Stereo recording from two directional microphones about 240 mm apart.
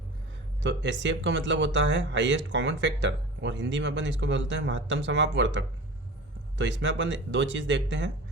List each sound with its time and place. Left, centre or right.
0.6 s speech: right